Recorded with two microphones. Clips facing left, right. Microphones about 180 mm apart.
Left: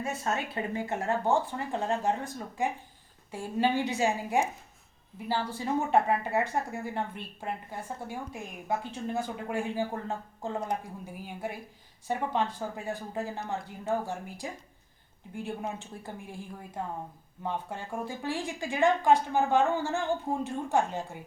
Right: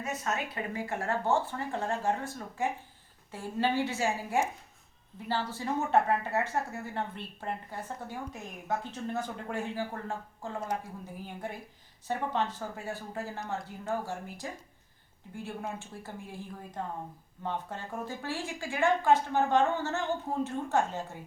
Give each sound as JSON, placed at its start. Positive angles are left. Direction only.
{"t": 0.0, "sound": "speech", "side_deg": 30}